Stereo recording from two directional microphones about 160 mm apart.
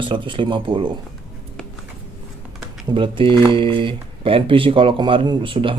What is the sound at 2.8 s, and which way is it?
Speech, 30° right (ahead or behind).